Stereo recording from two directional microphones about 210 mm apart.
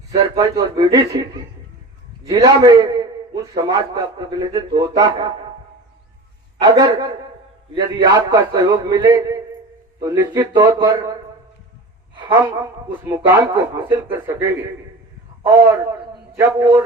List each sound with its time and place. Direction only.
0.1 s a man's voice: 15° right (ahead or behind)
2.4 s a man's voice: 20° right (ahead or behind)
6.6 s a man's voice: 15° right (ahead or behind)
7.9 s a man's voice: 20° right (ahead or behind)
12.3 s a man's voice: 15° right (ahead or behind)
16.3 s a man's voice: 10° right (ahead or behind)